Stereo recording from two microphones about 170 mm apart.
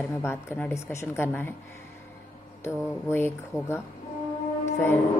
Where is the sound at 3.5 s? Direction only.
5° right (ahead or behind).